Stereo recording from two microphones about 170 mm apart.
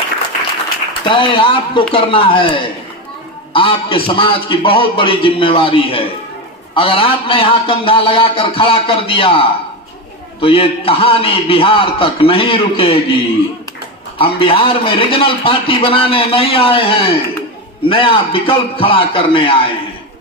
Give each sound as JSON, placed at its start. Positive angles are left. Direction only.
{"t": 1.0, "sound": "a man's voice", "side_deg": 30}